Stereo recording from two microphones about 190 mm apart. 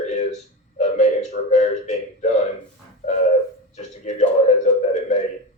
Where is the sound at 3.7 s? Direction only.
35° left (ahead or behind).